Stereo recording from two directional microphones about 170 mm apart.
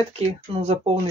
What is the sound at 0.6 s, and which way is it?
Speech, 35° right (ahead or behind).